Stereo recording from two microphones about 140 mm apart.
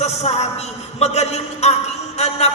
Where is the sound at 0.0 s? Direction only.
50° left (ahead or behind).